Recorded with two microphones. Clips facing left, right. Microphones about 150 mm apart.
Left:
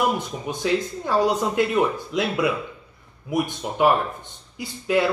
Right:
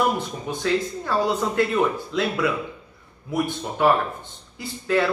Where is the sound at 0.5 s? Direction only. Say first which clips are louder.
Even; 15° left (ahead or behind).